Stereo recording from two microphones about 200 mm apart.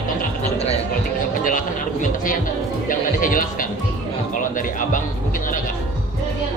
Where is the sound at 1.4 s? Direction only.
40° left (ahead or behind).